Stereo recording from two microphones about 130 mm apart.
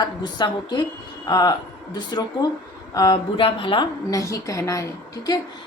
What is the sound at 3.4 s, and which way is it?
Speech, 40° left (ahead or behind).